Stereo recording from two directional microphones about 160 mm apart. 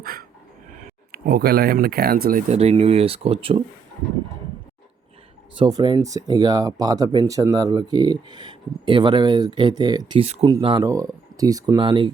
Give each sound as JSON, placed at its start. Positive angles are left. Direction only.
{"t": 0.0, "sound": "a sound", "side_deg": -65}
{"t": 1.1, "sound": "speech", "side_deg": -75}
{"t": 2.5, "sound": "speech", "side_deg": -40}
{"t": 5.5, "sound": "speech", "side_deg": -25}
{"t": 10.2, "sound": "speech", "side_deg": -40}
{"t": 10.4, "sound": "speech", "side_deg": -25}